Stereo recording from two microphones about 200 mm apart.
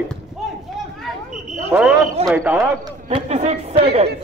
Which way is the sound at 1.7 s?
10° right (ahead or behind).